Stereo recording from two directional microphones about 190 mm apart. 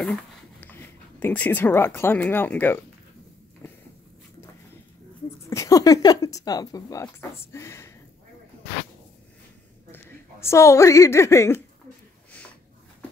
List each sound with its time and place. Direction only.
0.0 s speech: 5° left (ahead or behind)
3.6 s walk: 15° left (ahead or behind)
5.5 s speech: 15° left (ahead or behind)
9.8 s a woman's voice: 10° left (ahead or behind)